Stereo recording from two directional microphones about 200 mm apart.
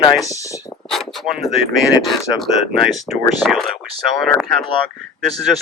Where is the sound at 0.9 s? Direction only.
Centre (ahead or behind).